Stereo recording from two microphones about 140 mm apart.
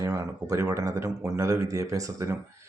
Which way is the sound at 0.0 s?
20° right (ahead or behind).